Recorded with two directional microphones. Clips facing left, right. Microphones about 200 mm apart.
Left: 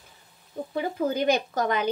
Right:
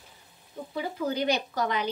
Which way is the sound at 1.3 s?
50° left (ahead or behind).